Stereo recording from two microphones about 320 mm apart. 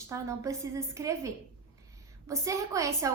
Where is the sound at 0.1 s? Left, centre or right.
Centre.